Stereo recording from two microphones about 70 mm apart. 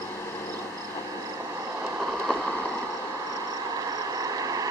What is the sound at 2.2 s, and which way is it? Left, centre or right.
Vehicle, centre.